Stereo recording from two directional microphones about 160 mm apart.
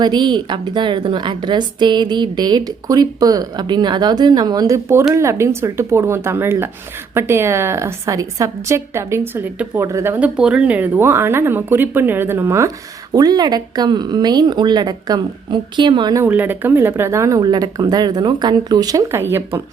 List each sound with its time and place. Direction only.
0.0 s a woman's voice: 25° right (ahead or behind)
16.2 s a woman's voice: 10° right (ahead or behind)